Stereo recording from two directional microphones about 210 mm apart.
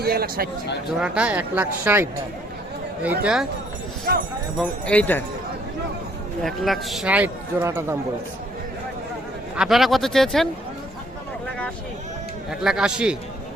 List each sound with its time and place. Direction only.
0.0 s speech: 45° right (ahead or behind)
0.9 s speech: 5° right (ahead or behind)
4.5 s speech: 5° left (ahead or behind)
6.4 s speech: centre (ahead or behind)
9.6 s speech: centre (ahead or behind)
12.5 s speech: centre (ahead or behind)